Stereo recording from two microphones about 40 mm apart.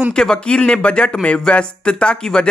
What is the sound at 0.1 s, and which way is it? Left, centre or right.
Speech, centre.